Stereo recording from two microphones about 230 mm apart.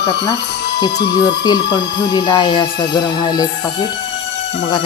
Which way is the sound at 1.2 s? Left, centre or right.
Centre.